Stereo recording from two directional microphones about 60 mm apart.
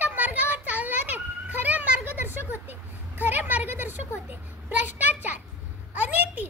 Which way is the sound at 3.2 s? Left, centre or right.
Right.